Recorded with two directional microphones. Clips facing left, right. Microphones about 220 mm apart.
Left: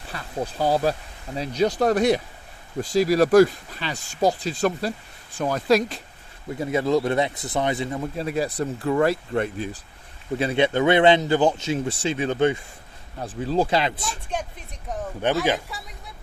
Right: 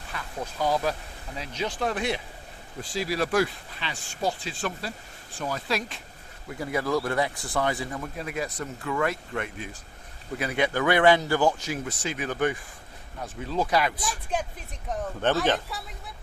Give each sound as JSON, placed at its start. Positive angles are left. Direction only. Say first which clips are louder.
{"t": 0.1, "sound": "speech", "louder": "left 6 dB", "side_deg": 35}
{"t": 6.5, "sound": "a man's voice", "louder": "left 5 dB", "side_deg": 25}
{"t": 14.9, "sound": "a man's voice", "louder": "left 2 dB", "side_deg": 0}